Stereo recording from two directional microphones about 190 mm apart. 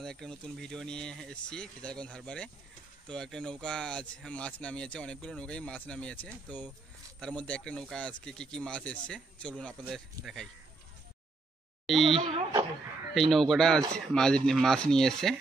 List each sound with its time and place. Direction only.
0.0 s speech: 5° left (ahead or behind)
11.8 s speech: centre (ahead or behind)
12.2 s speech: 30° right (ahead or behind)
13.1 s speech: centre (ahead or behind)